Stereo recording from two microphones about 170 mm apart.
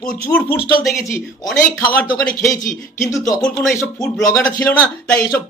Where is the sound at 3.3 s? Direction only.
5° left (ahead or behind).